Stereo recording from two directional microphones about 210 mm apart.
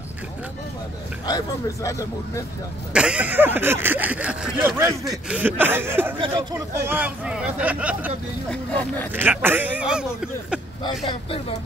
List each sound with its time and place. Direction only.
1.2 s speech: 15° left (ahead or behind)
2.9 s speech: 5° right (ahead or behind)
6.1 s speech: 20° right (ahead or behind); by 8.1 s 5° right (ahead or behind)
8.5 s speech: 5° left (ahead or behind)
9.1 s speech: 10° right (ahead or behind)
11.1 s speech: 25° left (ahead or behind)